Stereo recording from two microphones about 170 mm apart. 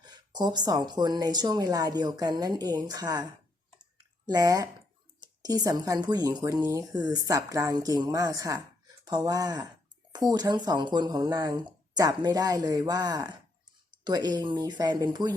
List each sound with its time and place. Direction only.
0.0 s speech: 25° right (ahead or behind)
4.3 s speech: 20° right (ahead or behind)